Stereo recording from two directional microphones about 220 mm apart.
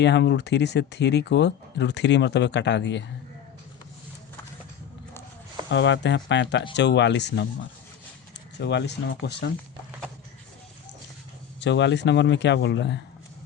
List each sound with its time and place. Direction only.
0.0 s speech: 50° left (ahead or behind)
5.7 s speech: 55° left (ahead or behind)
8.5 s speech: 50° left (ahead or behind)
11.6 s speech: 55° left (ahead or behind)